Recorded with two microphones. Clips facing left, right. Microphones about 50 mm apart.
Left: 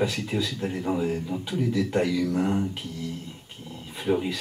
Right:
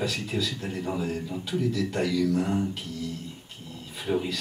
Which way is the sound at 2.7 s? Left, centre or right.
Centre.